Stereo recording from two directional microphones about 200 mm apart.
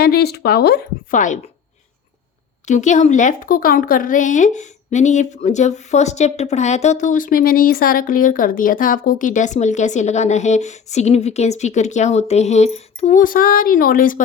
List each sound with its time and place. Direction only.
0.0 s speech: 50° left (ahead or behind)
2.6 s speech: 35° left (ahead or behind)